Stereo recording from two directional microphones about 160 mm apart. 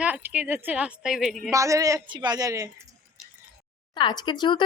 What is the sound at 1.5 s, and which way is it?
A woman's voice, 20° right (ahead or behind).